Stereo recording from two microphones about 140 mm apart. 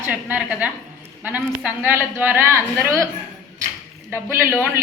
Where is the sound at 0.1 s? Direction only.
10° right (ahead or behind).